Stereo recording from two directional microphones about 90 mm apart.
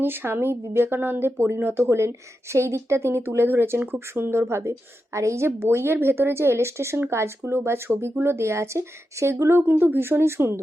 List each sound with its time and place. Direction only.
0.0 s speech: 25° right (ahead or behind)